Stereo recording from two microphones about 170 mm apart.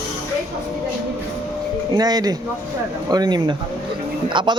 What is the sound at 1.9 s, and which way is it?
Speech, 20° right (ahead or behind).